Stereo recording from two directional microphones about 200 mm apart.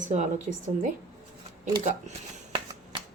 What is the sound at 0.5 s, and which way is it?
Speech, 35° right (ahead or behind).